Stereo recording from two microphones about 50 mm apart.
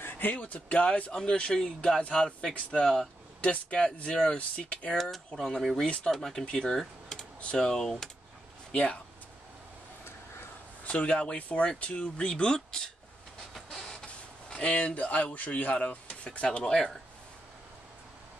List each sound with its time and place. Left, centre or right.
0.0 s speech: left; by 3.0 s centre
3.3 s speech: left
5.3 s speech: centre
5.6 s speech: centre
6.8 s computer keyboard: centre
7.3 s speech: centre
8.7 s speech: left
10.8 s speech: left
13.6 s vehicle: centre
14.0 s speech: left
16.3 s speech: centre